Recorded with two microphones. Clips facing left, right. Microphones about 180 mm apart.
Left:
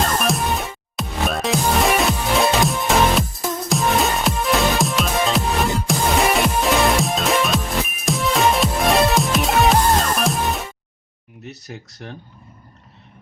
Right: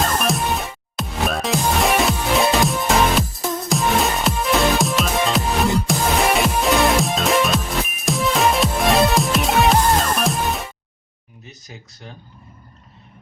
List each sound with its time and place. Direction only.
0.0 s music: centre (ahead or behind)
11.4 s speech: 70° left (ahead or behind)